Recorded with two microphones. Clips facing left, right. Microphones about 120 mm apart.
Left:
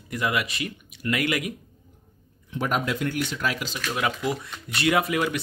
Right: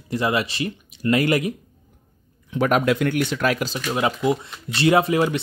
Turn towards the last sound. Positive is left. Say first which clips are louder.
# right 5 dB
turn(degrees=-30)  # may be behind; listen again after turning